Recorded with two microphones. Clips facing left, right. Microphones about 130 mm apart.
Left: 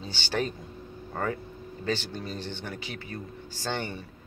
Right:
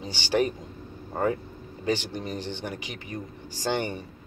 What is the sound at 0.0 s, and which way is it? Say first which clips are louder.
Speech: right 5 dB; 15° right (ahead or behind).